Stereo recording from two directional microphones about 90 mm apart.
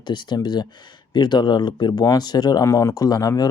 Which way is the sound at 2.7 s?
35° left (ahead or behind).